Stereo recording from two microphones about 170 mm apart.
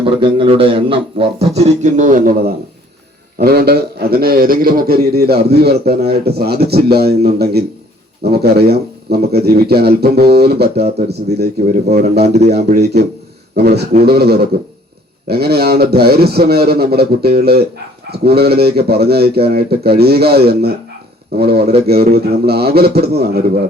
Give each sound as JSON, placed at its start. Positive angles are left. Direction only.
{"t": 0.0, "sound": "speech", "side_deg": -30}
{"t": 3.3, "sound": "a man's voice", "side_deg": -65}
{"t": 12.2, "sound": "speech", "side_deg": -40}
{"t": 12.5, "sound": "a man's voice", "side_deg": -70}